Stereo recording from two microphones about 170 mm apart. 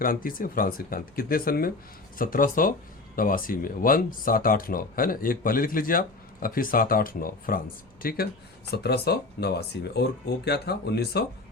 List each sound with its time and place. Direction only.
0.0 s speech: 55° left (ahead or behind)
8.7 s speech: 70° left (ahead or behind)